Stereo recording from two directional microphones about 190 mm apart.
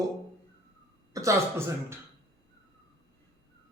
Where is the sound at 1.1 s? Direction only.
15° right (ahead or behind).